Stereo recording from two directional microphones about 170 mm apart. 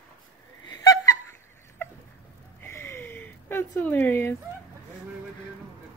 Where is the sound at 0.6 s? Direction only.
20° left (ahead or behind).